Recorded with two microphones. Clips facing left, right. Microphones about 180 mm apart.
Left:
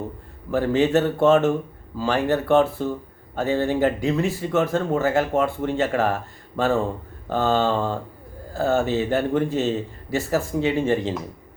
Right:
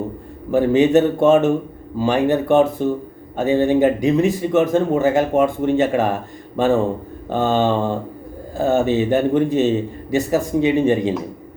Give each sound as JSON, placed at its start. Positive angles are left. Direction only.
{"t": 0.5, "sound": "speech", "side_deg": -15}
{"t": 7.3, "sound": "mantra", "side_deg": -20}
{"t": 8.5, "sound": "speech", "side_deg": -20}